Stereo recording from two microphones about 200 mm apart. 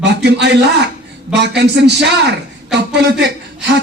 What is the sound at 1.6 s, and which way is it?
Speech, 60° right (ahead or behind).